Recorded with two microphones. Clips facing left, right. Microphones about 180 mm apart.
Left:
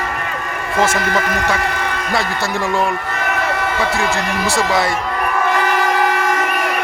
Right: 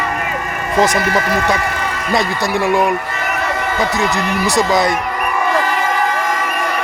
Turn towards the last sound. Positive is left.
turn(degrees=-15)  # may be behind; listen again after turning